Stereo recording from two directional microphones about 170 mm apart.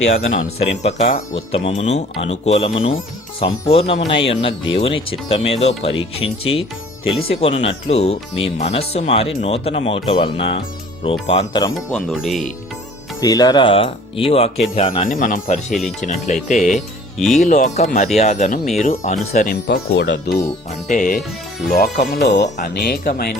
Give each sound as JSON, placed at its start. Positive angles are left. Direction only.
{"t": 0.3, "sound": "speech", "side_deg": 45}
{"t": 11.7, "sound": "speech", "side_deg": 0}
{"t": 13.2, "sound": "speech", "side_deg": 20}
{"t": 15.2, "sound": "speech", "side_deg": 50}
{"t": 17.2, "sound": "speech", "side_deg": 0}
{"t": 17.4, "sound": "speech", "side_deg": 45}
{"t": 19.5, "sound": "speech", "side_deg": 70}
{"t": 20.8, "sound": "speech", "side_deg": 50}
{"t": 21.7, "sound": "speech", "side_deg": 65}
{"t": 22.4, "sound": "speech", "side_deg": 55}